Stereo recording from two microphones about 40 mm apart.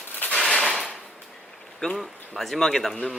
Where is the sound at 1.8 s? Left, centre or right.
Centre.